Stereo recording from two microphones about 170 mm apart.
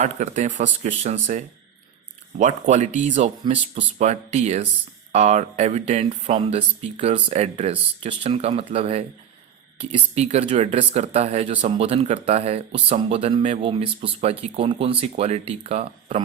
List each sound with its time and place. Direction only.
0.0 s speech: 45° right (ahead or behind)
10.2 s speech: 40° right (ahead or behind)